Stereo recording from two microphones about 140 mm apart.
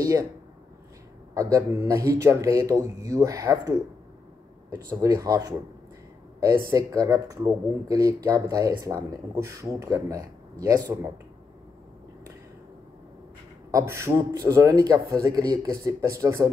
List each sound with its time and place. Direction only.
0.0 s speech: 25° right (ahead or behind)
1.3 s speech: 25° right (ahead or behind)
6.7 s speech: 25° right (ahead or behind)
13.7 s speech: 20° right (ahead or behind)